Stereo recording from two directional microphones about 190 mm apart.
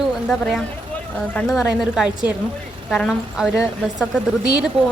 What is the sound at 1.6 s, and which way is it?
A woman's voice, 5° right (ahead or behind).